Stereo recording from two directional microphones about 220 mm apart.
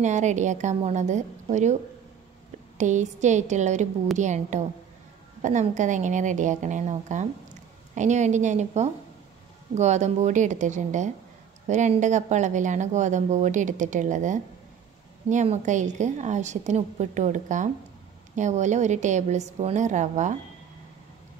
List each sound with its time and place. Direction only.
0.0 s speech: 35° right (ahead or behind)
2.8 s speech: 35° right (ahead or behind)